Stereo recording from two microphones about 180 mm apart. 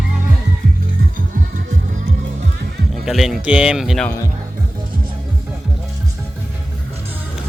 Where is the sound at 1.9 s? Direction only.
45° right (ahead or behind).